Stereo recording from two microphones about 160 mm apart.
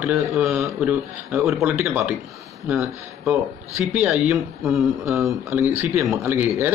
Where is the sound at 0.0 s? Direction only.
Centre (ahead or behind).